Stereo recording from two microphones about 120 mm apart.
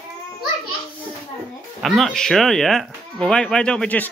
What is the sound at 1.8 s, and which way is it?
Speech, centre (ahead or behind).